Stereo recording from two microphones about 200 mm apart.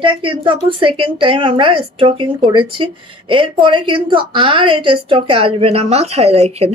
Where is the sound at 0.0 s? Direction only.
25° right (ahead or behind).